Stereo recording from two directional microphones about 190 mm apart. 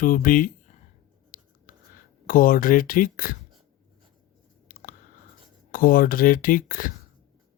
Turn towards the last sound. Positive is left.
turn(degrees=45)  # may be behind; listen again after turning